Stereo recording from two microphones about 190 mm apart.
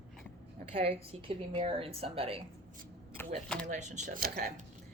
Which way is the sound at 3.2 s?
10° left (ahead or behind).